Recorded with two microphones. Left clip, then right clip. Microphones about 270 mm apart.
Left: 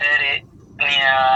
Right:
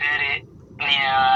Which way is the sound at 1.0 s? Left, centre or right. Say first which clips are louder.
Left 4 dB; centre.